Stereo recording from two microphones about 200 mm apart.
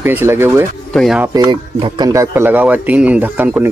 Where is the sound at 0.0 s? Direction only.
10° right (ahead or behind).